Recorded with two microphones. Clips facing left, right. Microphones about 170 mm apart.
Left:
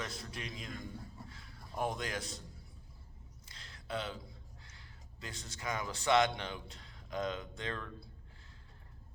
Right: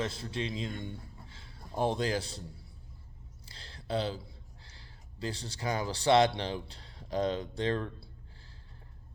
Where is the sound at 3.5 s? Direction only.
30° right (ahead or behind).